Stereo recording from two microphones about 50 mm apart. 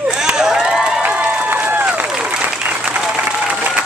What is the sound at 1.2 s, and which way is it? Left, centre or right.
Run, right.